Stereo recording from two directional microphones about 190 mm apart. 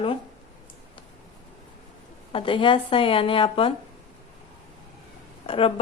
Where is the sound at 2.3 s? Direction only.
25° left (ahead or behind).